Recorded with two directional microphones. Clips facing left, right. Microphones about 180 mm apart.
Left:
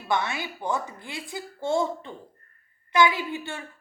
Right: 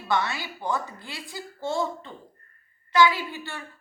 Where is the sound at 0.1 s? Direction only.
20° left (ahead or behind).